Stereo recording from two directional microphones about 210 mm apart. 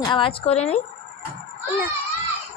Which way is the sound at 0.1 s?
25° left (ahead or behind).